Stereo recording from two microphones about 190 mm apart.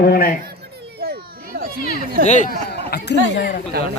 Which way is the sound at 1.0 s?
55° right (ahead or behind).